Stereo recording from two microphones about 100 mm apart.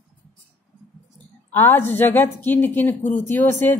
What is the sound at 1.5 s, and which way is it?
A woman's voice, 20° left (ahead or behind).